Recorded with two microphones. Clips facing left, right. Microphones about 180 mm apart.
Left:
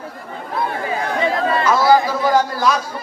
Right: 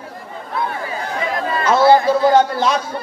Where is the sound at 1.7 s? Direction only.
25° right (ahead or behind).